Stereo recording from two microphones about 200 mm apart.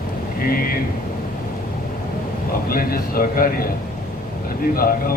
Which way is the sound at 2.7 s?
45° left (ahead or behind).